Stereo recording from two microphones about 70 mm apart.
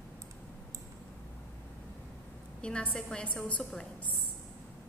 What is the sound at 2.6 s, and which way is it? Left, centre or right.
A woman's voice, centre.